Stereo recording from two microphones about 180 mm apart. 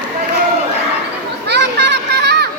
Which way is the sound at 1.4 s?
70° right (ahead or behind).